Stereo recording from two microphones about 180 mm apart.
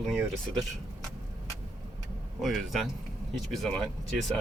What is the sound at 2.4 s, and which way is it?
Speech, centre (ahead or behind).